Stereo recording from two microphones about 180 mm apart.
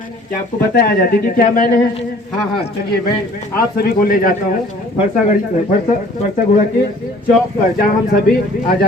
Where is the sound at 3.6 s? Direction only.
55° left (ahead or behind).